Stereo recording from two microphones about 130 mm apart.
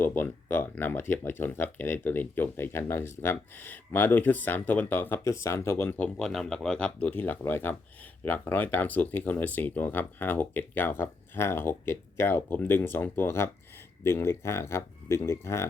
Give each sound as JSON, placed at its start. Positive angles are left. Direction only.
{"t": 0.0, "sound": "speech", "side_deg": 15}